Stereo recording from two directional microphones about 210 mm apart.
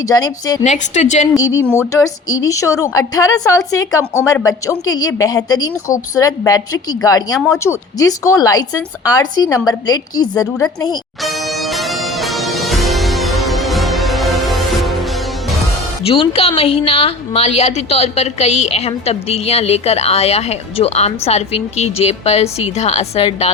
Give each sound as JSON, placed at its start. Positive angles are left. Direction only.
{"t": 0.1, "sound": "speech", "side_deg": 15}
{"t": 0.6, "sound": "a woman's voice", "side_deg": 35}
{"t": 1.4, "sound": "speech", "side_deg": 15}
{"t": 11.2, "sound": "music", "side_deg": 0}
{"t": 16.0, "sound": "a woman's voice", "side_deg": 25}